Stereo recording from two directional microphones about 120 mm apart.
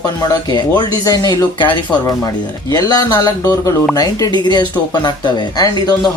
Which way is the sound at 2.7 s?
35° left (ahead or behind).